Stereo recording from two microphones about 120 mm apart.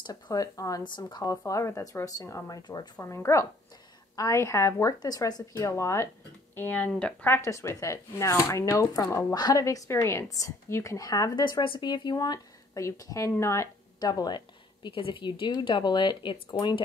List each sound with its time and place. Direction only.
0.0 s speech: 30° left (ahead or behind)